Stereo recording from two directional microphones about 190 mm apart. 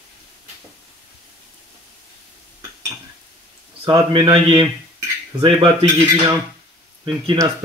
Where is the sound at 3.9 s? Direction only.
25° right (ahead or behind).